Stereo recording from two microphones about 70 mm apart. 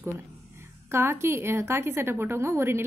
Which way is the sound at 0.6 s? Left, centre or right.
Right.